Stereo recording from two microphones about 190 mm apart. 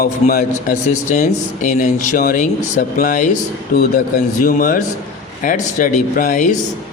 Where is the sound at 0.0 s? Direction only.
50° left (ahead or behind).